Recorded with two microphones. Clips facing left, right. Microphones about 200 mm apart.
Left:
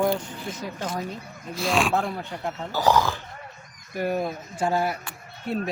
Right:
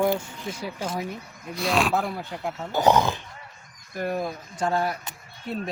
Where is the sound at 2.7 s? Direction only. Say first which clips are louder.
Right 2 dB; 20° right (ahead or behind).